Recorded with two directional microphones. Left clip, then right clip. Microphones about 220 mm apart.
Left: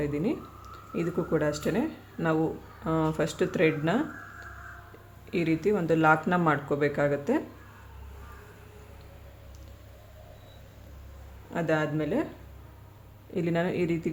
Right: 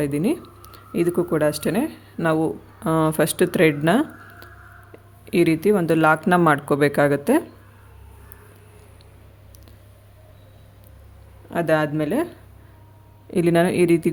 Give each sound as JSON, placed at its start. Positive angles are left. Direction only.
{"t": 0.0, "sound": "speech", "side_deg": -50}
{"t": 11.5, "sound": "speech", "side_deg": -50}
{"t": 13.3, "sound": "speech", "side_deg": -50}